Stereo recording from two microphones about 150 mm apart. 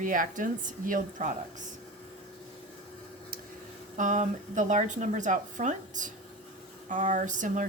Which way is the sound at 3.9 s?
55° right (ahead or behind).